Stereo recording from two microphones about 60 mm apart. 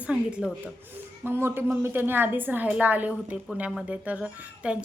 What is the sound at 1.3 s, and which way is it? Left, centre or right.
A woman's voice, right.